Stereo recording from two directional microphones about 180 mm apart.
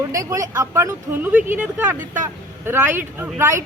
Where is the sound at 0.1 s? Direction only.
15° right (ahead or behind).